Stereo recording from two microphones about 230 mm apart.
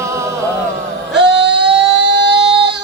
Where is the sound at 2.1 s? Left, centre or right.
Right.